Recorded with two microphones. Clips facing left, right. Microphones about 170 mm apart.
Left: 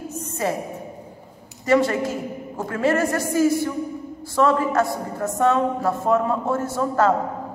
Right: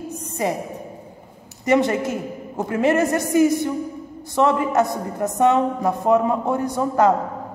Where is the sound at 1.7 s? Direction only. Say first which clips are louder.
Right 1 dB; 20° right (ahead or behind).